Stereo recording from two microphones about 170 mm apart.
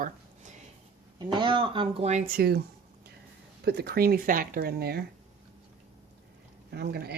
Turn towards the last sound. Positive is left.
turn(degrees=-70)  # may be behind; listen again after turning